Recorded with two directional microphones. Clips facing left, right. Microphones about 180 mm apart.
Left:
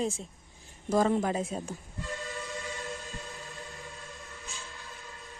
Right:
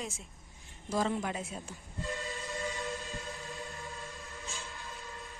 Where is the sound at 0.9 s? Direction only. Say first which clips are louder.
Left 6 dB; 50° left (ahead or behind).